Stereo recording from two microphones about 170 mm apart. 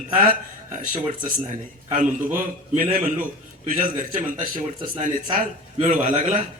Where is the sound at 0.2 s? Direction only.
50° right (ahead or behind).